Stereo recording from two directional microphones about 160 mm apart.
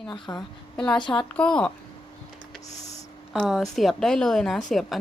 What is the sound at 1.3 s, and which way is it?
Speech, 5° left (ahead or behind).